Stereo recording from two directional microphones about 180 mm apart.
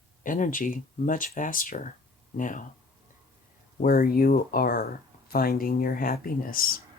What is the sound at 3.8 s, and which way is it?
Speech, 55° left (ahead or behind).